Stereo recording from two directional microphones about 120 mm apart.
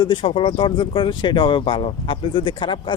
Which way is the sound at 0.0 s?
45° left (ahead or behind).